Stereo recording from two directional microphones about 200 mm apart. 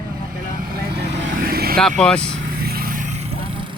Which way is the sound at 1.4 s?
50° right (ahead or behind).